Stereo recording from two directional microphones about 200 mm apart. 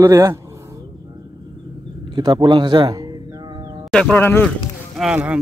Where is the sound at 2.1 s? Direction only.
20° right (ahead or behind).